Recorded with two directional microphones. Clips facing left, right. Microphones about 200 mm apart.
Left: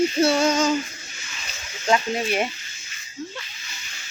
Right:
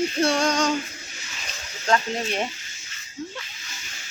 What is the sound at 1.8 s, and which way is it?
Speech, 10° left (ahead or behind).